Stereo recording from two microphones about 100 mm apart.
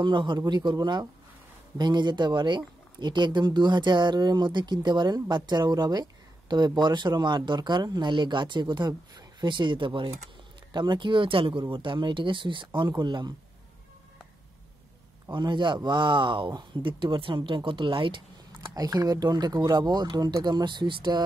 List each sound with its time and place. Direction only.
0.0 s speech: 50° right (ahead or behind)
15.3 s speech: 50° right (ahead or behind)
18.8 s speech: 40° right (ahead or behind)